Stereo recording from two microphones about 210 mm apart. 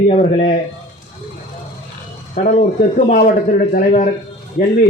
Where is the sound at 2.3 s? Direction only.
40° left (ahead or behind).